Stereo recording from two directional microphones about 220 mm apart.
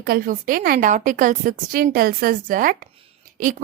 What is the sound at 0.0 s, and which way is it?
A woman's voice, 45° right (ahead or behind).